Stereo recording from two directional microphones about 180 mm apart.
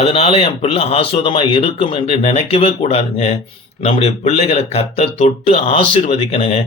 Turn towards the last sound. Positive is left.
turn(degrees=35)  # may be behind; listen again after turning